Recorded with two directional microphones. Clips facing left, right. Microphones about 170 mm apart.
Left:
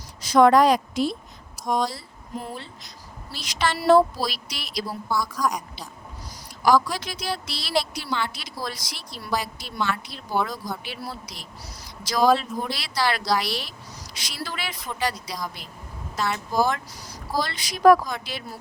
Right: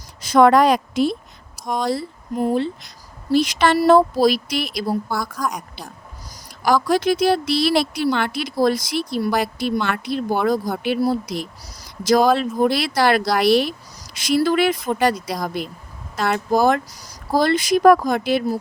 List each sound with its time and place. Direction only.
0.2 s a woman's voice: 60° right (ahead or behind)
11.0 s speech: 45° right (ahead or behind)
16.9 s speech: 40° right (ahead or behind)